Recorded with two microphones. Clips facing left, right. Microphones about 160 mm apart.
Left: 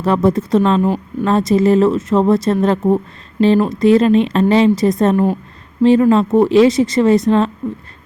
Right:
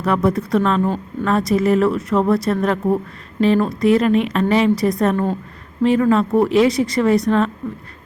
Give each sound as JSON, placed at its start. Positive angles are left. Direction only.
{"t": 0.0, "sound": "speech", "side_deg": 25}
{"t": 0.8, "sound": "speech", "side_deg": 10}
{"t": 1.2, "sound": "speech", "side_deg": 25}